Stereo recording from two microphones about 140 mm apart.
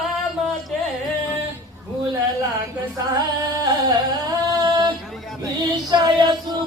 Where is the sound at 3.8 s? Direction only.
30° right (ahead or behind).